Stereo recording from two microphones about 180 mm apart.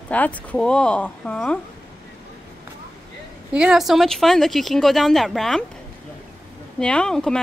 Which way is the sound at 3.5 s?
5° right (ahead or behind).